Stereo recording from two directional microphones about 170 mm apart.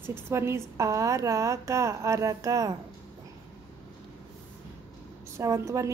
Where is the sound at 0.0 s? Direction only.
15° right (ahead or behind).